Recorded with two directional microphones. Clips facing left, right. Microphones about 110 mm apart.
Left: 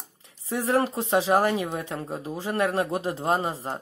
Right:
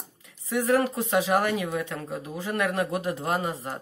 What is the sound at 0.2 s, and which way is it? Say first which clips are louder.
A woman's voice: right 2 dB; 30° left (ahead or behind).